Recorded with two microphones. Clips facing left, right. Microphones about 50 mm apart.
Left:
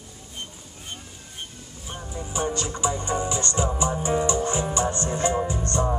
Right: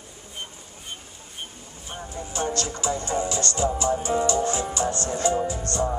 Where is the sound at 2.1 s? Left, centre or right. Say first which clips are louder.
Even; centre.